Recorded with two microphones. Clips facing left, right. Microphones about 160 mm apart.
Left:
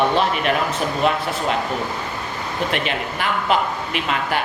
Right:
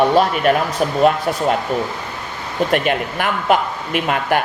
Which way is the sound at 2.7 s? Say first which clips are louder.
Right 6 dB; 50° right (ahead or behind).